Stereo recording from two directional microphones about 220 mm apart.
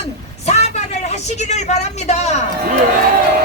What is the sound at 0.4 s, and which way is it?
A woman's voice, 30° left (ahead or behind).